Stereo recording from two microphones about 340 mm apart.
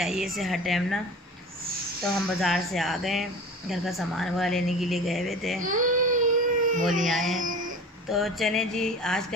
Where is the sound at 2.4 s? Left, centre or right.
Centre.